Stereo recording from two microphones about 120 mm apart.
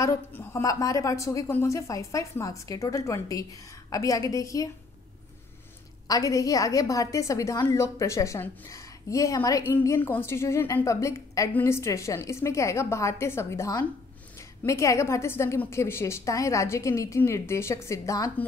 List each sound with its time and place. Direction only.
0.0 s a woman's voice: 25° left (ahead or behind)
6.0 s a woman's voice: 30° left (ahead or behind)